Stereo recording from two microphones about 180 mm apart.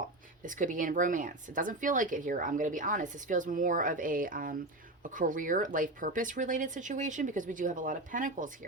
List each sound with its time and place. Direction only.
0.4 s speech: 45° right (ahead or behind)